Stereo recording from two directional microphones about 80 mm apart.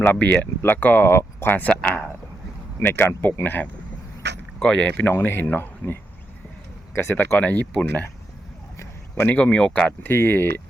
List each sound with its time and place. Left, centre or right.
0.0 s speech: left
1.7 s speech: centre
2.8 s speech: left
9.2 s speech: centre
10.0 s speech: left